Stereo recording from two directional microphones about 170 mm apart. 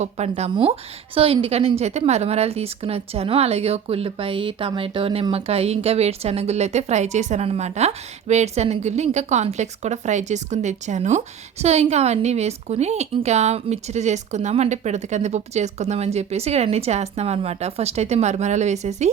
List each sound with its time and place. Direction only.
0.0 s a woman's voice: 40° right (ahead or behind)